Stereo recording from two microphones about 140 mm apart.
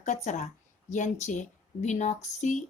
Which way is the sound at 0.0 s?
60° left (ahead or behind).